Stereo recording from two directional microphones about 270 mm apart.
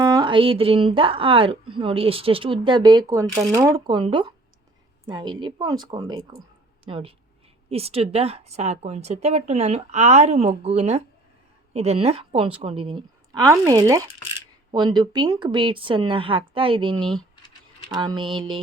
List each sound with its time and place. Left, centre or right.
0.0 s a woman's voice: centre